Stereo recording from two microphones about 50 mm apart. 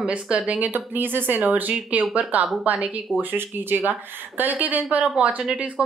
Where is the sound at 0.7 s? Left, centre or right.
Right.